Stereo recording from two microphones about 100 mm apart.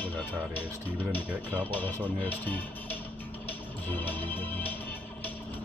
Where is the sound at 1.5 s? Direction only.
15° left (ahead or behind).